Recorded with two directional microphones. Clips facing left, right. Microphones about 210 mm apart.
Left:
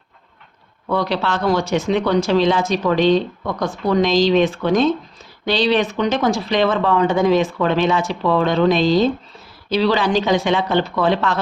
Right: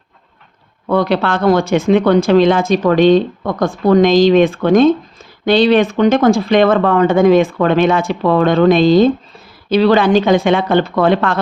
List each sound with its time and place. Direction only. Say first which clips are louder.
0.9 s speech: right 6 dB; 55° right (ahead or behind)